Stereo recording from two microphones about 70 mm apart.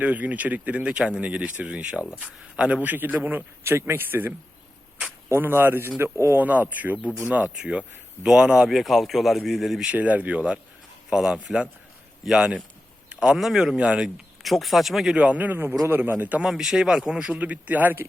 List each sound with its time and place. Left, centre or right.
0.0 s speech: right
3.6 s speech: right
5.3 s speech: right
6.4 s speech: right; by 9.9 s centre
9.9 s speech: right
14.4 s speech: centre
15.1 s speech: centre
16.5 s speech: centre
17.3 s speech: right